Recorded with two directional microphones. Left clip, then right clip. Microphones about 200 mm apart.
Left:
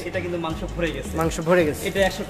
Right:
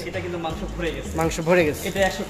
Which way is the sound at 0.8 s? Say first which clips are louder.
Left 2 dB; 55° left (ahead or behind).